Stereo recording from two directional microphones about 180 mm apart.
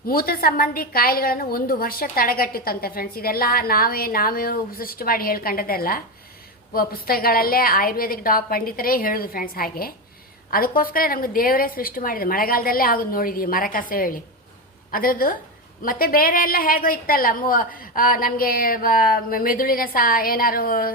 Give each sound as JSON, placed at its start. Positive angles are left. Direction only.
{"t": 0.1, "sound": "a woman's voice", "side_deg": 55}